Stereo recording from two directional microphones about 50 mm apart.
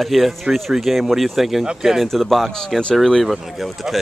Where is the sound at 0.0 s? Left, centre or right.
Centre.